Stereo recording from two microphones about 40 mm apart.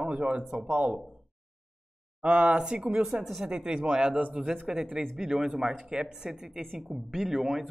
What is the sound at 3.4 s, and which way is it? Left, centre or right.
Speech, right.